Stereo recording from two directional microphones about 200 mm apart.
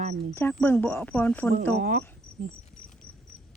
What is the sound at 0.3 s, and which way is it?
A woman's voice, 10° left (ahead or behind).